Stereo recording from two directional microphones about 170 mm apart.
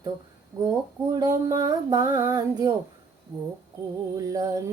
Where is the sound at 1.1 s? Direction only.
20° right (ahead or behind).